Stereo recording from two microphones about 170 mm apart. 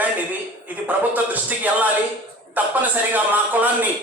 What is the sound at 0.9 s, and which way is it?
Speech, 10° right (ahead or behind).